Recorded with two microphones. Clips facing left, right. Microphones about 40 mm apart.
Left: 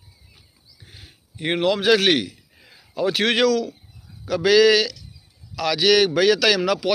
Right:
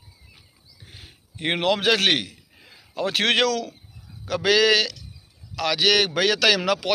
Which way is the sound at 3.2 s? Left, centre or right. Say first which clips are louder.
Left 2 dB; right.